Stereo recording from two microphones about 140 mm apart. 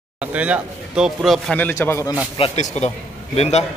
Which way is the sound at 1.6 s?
15° left (ahead or behind).